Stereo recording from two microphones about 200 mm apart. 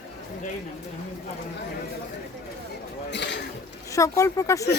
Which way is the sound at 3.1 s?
60° left (ahead or behind).